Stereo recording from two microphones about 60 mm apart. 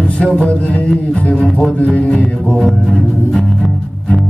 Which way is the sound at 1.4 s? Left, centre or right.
Centre.